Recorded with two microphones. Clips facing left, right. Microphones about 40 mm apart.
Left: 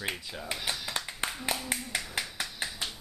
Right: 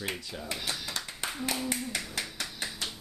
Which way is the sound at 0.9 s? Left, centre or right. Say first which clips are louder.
Left 2 dB; centre.